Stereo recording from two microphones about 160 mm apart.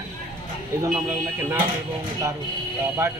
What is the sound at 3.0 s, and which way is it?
Speech, 15° right (ahead or behind).